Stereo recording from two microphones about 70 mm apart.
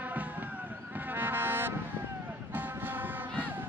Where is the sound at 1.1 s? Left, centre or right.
Right.